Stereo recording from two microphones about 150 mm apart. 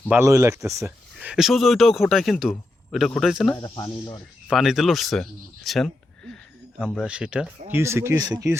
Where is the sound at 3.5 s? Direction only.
30° left (ahead or behind).